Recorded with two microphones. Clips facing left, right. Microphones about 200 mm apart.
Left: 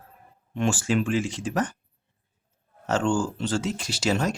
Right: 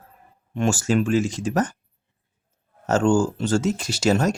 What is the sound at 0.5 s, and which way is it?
Speech, 45° right (ahead or behind).